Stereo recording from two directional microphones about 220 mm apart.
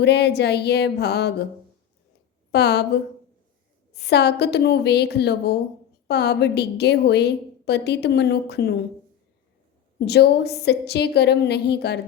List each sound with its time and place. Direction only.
0.0 s a woman's voice: 50° left (ahead or behind)
2.5 s a woman's voice: 50° left (ahead or behind)
10.1 s a woman's voice: 50° left (ahead or behind)